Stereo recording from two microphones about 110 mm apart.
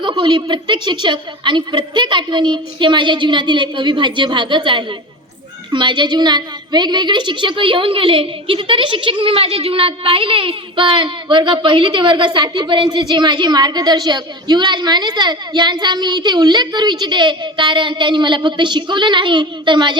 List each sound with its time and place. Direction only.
0.0 s a woman's voice: 45° right (ahead or behind)